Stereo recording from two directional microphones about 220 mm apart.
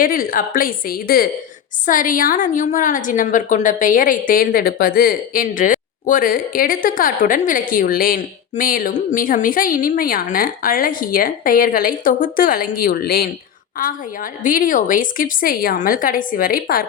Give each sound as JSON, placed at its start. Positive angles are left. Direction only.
{"t": 0.0, "sound": "a woman's voice", "side_deg": 40}